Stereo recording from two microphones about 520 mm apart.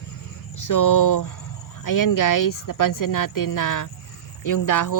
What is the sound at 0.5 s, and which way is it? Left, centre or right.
Speech, left.